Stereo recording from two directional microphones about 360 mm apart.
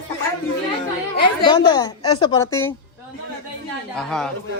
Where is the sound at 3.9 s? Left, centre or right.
Centre.